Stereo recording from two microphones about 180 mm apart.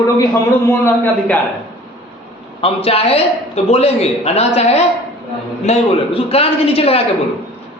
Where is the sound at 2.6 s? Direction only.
35° left (ahead or behind).